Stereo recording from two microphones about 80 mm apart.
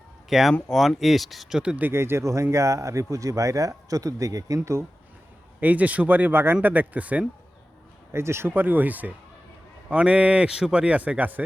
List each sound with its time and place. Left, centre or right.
0.3 s speech: centre
1.9 s speech: right
5.5 s speech: centre
8.1 s speech: right